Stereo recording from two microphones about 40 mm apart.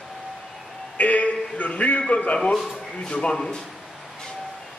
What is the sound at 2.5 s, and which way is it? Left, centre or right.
Speech, centre.